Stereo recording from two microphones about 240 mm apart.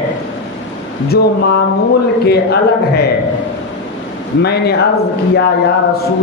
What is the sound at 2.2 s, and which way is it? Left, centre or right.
Speech, left.